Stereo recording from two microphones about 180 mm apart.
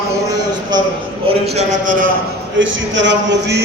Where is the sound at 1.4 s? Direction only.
40° right (ahead or behind).